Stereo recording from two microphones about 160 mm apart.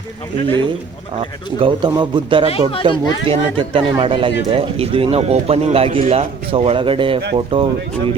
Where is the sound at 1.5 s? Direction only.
35° right (ahead or behind).